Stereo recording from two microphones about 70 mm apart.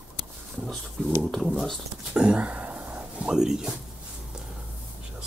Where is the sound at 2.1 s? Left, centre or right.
Centre.